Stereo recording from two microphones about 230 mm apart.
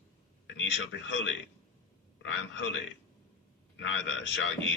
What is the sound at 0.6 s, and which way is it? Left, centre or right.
Speech, left.